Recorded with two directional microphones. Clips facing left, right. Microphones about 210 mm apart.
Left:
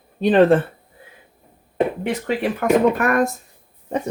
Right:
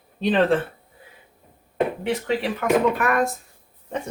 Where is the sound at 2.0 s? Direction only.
50° left (ahead or behind).